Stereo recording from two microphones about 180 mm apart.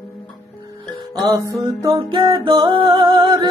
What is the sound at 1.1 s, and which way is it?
Music, 20° right (ahead or behind).